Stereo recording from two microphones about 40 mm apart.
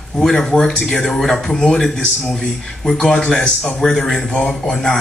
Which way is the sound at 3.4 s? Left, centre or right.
Left.